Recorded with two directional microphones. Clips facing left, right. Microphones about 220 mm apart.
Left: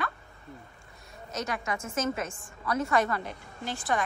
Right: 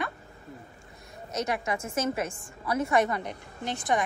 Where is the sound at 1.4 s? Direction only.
25° right (ahead or behind).